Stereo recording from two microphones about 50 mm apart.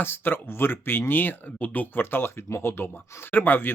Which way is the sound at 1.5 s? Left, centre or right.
Left.